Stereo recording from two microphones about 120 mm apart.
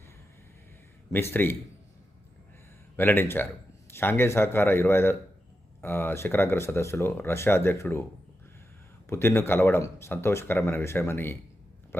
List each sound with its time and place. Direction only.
1.1 s speech: 15° left (ahead or behind)
2.9 s speech: 20° left (ahead or behind)
9.0 s speech: 20° left (ahead or behind)